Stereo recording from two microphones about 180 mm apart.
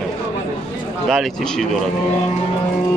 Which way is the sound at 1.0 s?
Centre (ahead or behind).